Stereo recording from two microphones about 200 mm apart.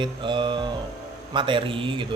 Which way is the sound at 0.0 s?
25° right (ahead or behind).